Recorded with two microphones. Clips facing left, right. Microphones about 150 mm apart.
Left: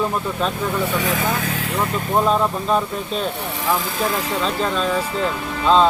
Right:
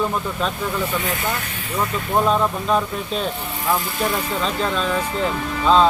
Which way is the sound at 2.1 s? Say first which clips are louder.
Even; centre (ahead or behind).